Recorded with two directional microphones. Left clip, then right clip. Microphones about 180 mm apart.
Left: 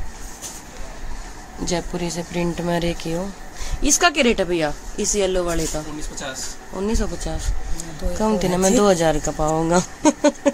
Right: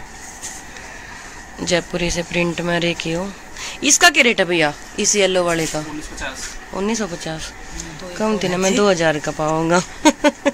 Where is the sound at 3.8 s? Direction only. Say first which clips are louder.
Right 5 dB; 5° right (ahead or behind).